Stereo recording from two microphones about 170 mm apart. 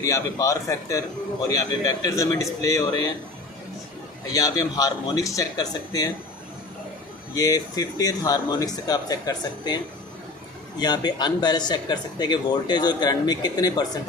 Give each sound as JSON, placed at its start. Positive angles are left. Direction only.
{"t": 0.0, "sound": "a man's voice", "side_deg": 20}
{"t": 4.3, "sound": "a man's voice", "side_deg": 20}
{"t": 7.3, "sound": "a man's voice", "side_deg": 20}